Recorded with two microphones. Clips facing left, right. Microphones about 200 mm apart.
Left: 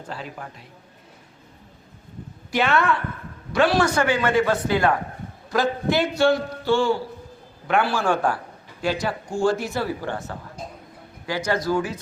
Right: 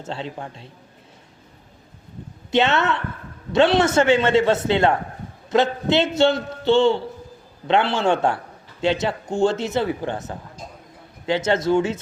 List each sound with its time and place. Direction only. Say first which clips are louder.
0.0 s a man's voice: right 4 dB; 25° right (ahead or behind)
2.5 s a man's voice: right 2 dB; 25° right (ahead or behind)